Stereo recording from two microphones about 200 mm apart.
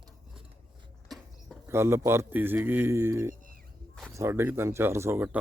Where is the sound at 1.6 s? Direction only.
15° right (ahead or behind).